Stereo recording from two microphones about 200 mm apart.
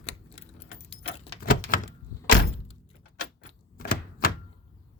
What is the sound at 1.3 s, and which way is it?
Door, 45° left (ahead or behind).